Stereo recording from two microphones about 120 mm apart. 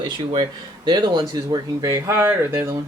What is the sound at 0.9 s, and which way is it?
Speech, 35° right (ahead or behind).